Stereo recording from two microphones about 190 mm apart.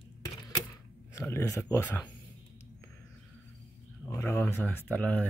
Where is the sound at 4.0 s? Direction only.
10° left (ahead or behind).